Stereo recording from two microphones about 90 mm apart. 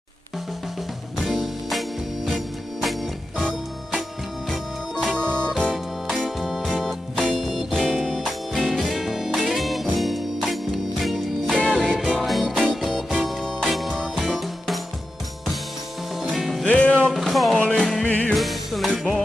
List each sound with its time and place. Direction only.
1.1 s music: centre (ahead or behind)
5.1 s music: 15° left (ahead or behind)
6.0 s music: centre (ahead or behind)
16.2 s music: 5° right (ahead or behind)
16.6 s music: 15° left (ahead or behind)
17.1 s music: centre (ahead or behind); by 18.3 s 20° left (ahead or behind)
18.3 s music: centre (ahead or behind)